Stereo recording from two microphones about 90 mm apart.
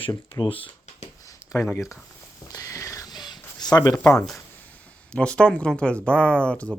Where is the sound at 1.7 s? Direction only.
35° left (ahead or behind).